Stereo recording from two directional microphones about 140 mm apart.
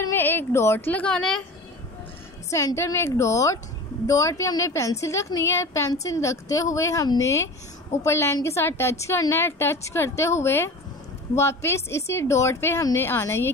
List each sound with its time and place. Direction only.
0.1 s a woman's voice: 15° left (ahead or behind)
2.5 s a woman's voice: 20° left (ahead or behind)